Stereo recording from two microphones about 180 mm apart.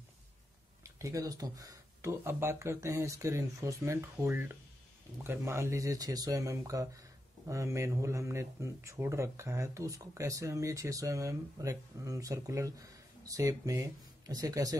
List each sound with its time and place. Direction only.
0.8 s speech: 15° right (ahead or behind)